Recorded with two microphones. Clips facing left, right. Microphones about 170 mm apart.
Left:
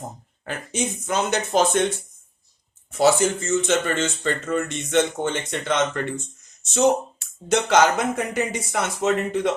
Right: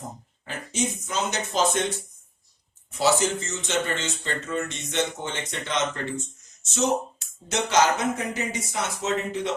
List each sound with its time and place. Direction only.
0.4 s speech: 60° left (ahead or behind)
3.0 s speech: 50° left (ahead or behind)
7.4 s speech: 55° left (ahead or behind)